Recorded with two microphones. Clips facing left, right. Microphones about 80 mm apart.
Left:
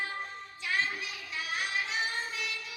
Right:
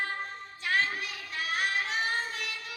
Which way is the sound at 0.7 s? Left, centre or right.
Right.